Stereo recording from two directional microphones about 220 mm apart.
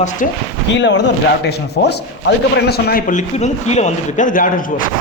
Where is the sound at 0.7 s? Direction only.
55° left (ahead or behind); by 4.6 s 40° left (ahead or behind).